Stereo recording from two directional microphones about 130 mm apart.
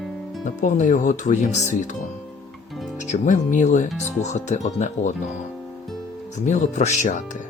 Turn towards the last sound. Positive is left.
turn(degrees=70)  # may be behind; listen again after turning